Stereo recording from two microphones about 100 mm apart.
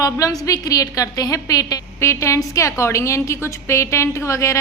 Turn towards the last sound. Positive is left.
turn(degrees=30)  # may be behind; listen again after turning